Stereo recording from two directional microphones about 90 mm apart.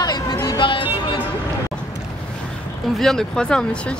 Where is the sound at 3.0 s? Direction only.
5° left (ahead or behind).